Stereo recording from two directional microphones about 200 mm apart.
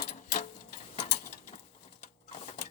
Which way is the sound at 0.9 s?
35° left (ahead or behind).